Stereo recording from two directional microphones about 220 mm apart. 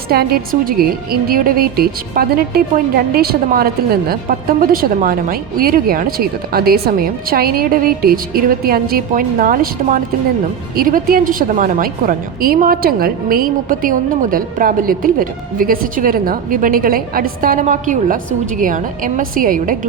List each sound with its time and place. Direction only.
0.1 s a woman's voice: 45° right (ahead or behind)